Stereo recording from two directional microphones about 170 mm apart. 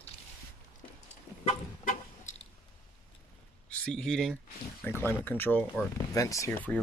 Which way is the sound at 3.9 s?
5° left (ahead or behind).